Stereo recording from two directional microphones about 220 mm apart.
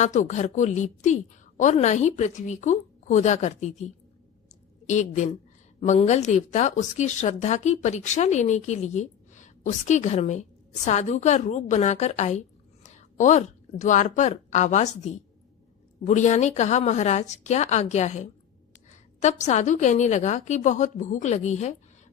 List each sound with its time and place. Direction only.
0.0 s speech: 35° left (ahead or behind)
4.4 s a sound: 35° left (ahead or behind)
5.8 s a woman's voice: 30° left (ahead or behind)